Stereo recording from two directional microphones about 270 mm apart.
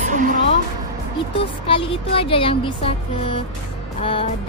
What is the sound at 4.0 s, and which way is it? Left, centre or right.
Speech, left.